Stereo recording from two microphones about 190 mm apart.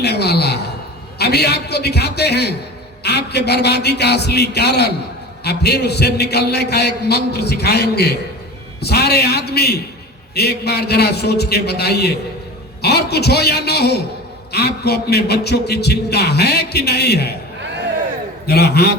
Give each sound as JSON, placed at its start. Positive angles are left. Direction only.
{"t": 0.0, "sound": "a sound", "side_deg": 60}
{"t": 1.2, "sound": "a man's voice", "side_deg": 60}
{"t": 18.4, "sound": "a man's voice", "side_deg": 60}